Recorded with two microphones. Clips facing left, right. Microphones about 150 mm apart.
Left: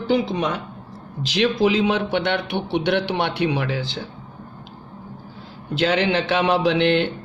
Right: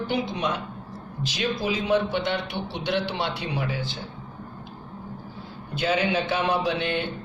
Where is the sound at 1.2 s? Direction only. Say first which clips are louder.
Left 8 dB; 90° left.